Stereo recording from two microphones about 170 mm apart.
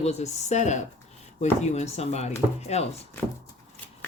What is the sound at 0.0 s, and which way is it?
A woman's voice, 40° left (ahead or behind).